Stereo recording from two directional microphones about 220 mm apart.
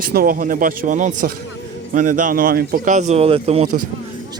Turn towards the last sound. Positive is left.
turn(degrees=-35)  # may be behind; listen again after turning